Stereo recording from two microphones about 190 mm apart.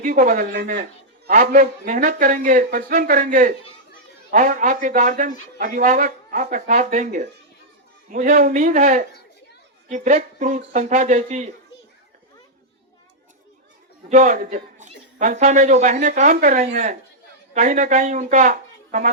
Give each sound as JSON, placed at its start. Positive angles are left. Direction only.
{"t": 0.0, "sound": "a man's voice", "side_deg": -45}
{"t": 14.1, "sound": "a man's voice", "side_deg": -40}